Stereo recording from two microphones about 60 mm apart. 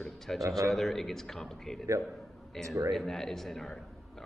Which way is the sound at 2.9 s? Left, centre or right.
Centre.